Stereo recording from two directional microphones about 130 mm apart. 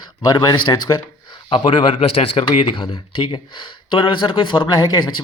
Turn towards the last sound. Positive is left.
turn(degrees=30)  # may be behind; listen again after turning